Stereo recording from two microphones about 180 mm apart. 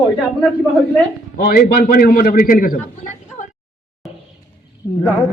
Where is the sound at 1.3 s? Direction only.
55° left (ahead or behind).